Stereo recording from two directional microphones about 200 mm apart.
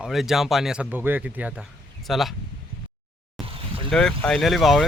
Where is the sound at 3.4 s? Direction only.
25° right (ahead or behind).